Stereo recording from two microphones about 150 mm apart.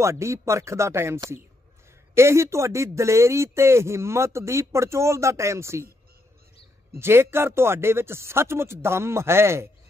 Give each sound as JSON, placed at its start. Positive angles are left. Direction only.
{"t": 0.0, "sound": "speech", "side_deg": -20}
{"t": 7.0, "sound": "speech", "side_deg": -15}